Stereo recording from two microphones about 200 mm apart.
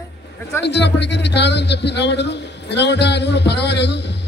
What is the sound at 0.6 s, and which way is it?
A man's voice, 60° left (ahead or behind).